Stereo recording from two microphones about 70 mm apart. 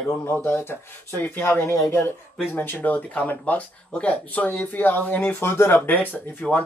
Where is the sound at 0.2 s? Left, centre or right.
Left.